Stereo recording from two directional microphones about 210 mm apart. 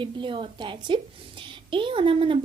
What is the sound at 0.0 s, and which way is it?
Speech, 25° right (ahead or behind).